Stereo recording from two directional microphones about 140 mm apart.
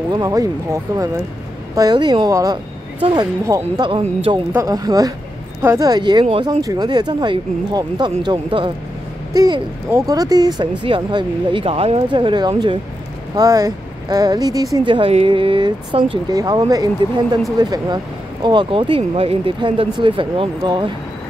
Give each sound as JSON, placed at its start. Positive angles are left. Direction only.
{"t": 0.1, "sound": "speech", "side_deg": -25}
{"t": 3.9, "sound": "speech", "side_deg": -40}
{"t": 4.5, "sound": "speech", "side_deg": -25}
{"t": 9.3, "sound": "speech", "side_deg": -25}
{"t": 15.0, "sound": "speech", "side_deg": -40}